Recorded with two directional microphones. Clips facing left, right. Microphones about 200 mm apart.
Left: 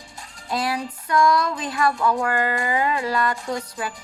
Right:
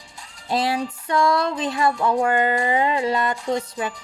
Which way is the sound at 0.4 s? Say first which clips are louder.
Right 3 dB; 25° right (ahead or behind).